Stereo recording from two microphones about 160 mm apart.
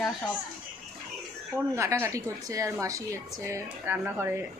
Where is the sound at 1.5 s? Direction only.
15° right (ahead or behind).